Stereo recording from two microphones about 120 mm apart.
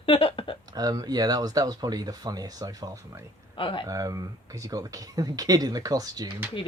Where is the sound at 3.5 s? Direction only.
45° left (ahead or behind).